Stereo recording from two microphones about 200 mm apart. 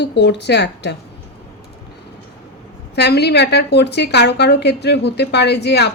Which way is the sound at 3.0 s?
55° left (ahead or behind).